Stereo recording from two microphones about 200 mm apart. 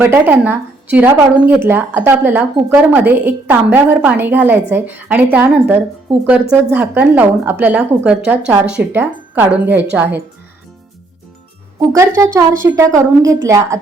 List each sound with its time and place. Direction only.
0.0 s speech: 10° right (ahead or behind)
11.8 s speech: 15° right (ahead or behind)